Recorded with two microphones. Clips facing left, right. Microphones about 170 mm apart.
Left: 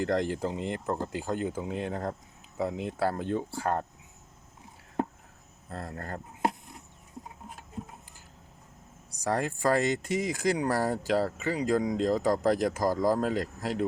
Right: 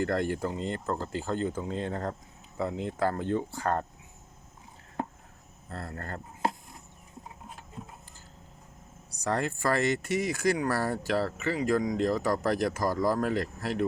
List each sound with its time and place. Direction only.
0.0 s speech: 15° left (ahead or behind)
5.6 s speech: 15° left (ahead or behind)
9.2 s speech: 10° left (ahead or behind)